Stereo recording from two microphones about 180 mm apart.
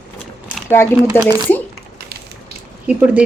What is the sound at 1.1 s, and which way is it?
Speech, 10° left (ahead or behind).